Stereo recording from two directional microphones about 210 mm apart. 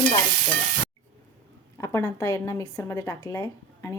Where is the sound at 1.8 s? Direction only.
15° left (ahead or behind).